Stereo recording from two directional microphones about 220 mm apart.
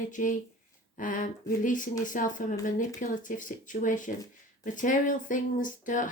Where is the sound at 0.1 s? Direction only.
35° left (ahead or behind).